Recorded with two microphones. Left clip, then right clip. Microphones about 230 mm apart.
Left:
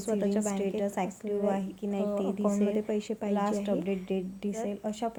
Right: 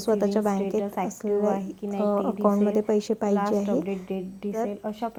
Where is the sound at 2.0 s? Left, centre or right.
Right.